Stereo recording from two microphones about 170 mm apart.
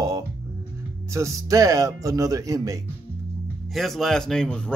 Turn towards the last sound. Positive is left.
turn(degrees=5)  # may be behind; listen again after turning